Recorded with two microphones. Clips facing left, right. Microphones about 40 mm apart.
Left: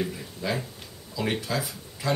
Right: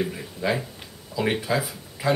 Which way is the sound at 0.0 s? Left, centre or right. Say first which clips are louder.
Right 4 dB; centre.